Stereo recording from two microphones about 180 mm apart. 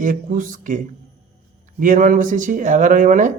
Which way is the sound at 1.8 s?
45° right (ahead or behind).